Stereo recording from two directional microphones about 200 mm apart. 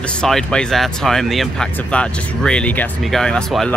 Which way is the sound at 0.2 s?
5° left (ahead or behind).